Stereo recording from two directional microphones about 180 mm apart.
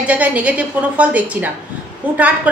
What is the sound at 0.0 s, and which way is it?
A woman's voice, 10° right (ahead or behind).